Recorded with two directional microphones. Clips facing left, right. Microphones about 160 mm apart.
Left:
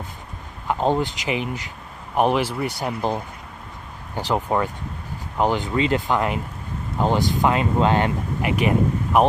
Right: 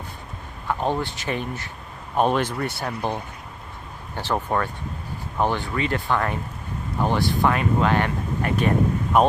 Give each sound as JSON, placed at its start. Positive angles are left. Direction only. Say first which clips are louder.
{"t": 0.7, "sound": "speech", "louder": "left 3 dB", "side_deg": 15}